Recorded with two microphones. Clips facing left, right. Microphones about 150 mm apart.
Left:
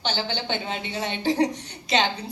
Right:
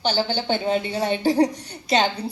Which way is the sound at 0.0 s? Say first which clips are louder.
Right 5 dB; 35° right (ahead or behind).